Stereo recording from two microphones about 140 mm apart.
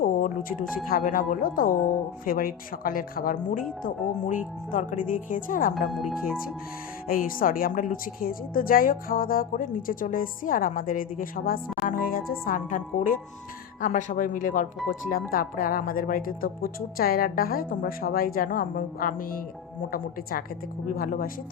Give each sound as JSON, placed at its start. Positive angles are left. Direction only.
{"t": 0.0, "sound": "music", "side_deg": 85}
{"t": 0.9, "sound": "a woman's voice", "side_deg": 85}
{"t": 5.9, "sound": "speech", "side_deg": 0}
{"t": 7.1, "sound": "a woman's voice", "side_deg": 90}
{"t": 15.3, "sound": "a woman's voice", "side_deg": 90}
{"t": 20.8, "sound": "a woman's voice", "side_deg": 85}